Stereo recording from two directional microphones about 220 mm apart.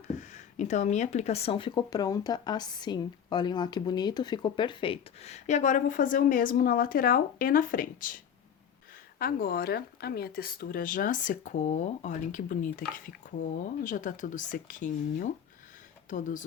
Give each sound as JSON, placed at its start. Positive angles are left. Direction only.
{"t": 0.2, "sound": "speech", "side_deg": 35}
{"t": 13.8, "sound": "speech", "side_deg": 35}